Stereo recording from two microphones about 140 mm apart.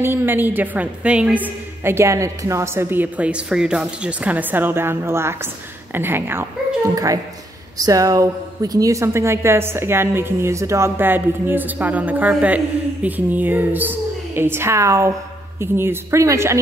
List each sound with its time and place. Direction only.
0.0 s speech: 15° right (ahead or behind)
7.7 s a woman's voice: 25° right (ahead or behind)